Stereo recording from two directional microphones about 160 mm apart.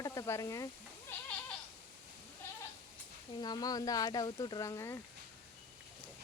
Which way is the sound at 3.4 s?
25° left (ahead or behind).